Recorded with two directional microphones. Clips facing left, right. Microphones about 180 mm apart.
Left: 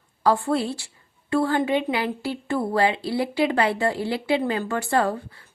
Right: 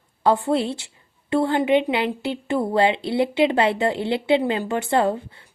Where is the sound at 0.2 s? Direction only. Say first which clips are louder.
Right 2 dB; 20° right (ahead or behind).